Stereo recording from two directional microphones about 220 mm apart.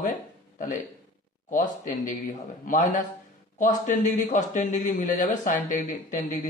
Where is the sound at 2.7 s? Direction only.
40° left (ahead or behind).